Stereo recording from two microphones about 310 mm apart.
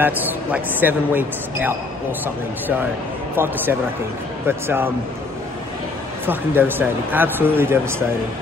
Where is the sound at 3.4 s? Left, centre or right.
Centre.